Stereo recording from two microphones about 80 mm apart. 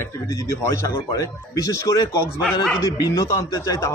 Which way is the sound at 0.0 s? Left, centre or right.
Left.